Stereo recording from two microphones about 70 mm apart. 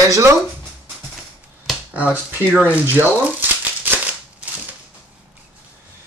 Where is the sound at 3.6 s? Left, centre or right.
Right.